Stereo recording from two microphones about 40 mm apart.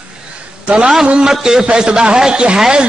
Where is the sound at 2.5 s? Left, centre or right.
Centre.